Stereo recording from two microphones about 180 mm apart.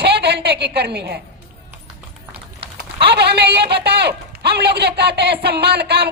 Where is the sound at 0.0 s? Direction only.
65° right (ahead or behind).